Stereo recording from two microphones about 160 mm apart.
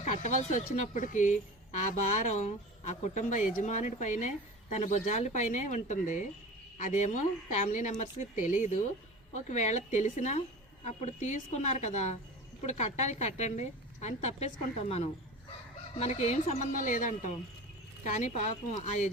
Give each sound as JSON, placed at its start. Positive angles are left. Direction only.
{"t": 0.0, "sound": "a woman's voice", "side_deg": 45}